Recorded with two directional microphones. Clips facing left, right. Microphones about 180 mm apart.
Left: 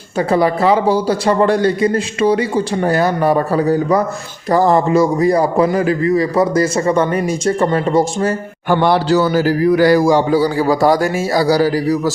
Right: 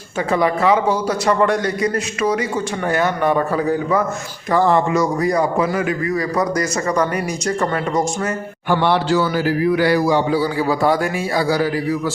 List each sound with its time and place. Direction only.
0.2 s a man's voice: 35° left (ahead or behind)
8.7 s a man's voice: 40° left (ahead or behind)